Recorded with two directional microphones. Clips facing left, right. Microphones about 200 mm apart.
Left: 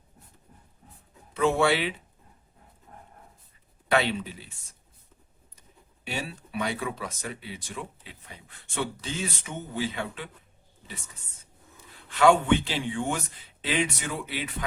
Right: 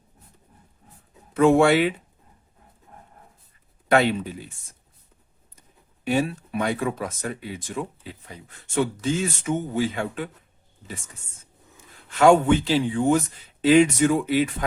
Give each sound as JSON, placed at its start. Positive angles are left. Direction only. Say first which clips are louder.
{"t": 1.3, "sound": "speech", "louder": "right 7 dB", "side_deg": -50}
{"t": 3.8, "sound": "speech", "louder": "right 5 dB", "side_deg": -45}
{"t": 6.1, "sound": "speech", "louder": "right 12 dB", "side_deg": -50}
{"t": 11.8, "sound": "a man's voice", "louder": "right 4 dB", "side_deg": -45}